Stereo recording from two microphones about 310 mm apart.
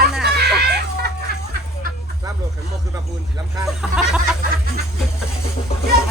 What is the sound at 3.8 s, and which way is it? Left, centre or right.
Speech, centre.